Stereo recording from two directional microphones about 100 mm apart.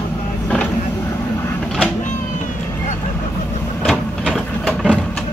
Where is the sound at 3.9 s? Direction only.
10° left (ahead or behind).